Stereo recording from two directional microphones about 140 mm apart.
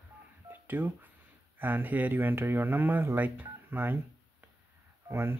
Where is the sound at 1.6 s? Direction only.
15° right (ahead or behind).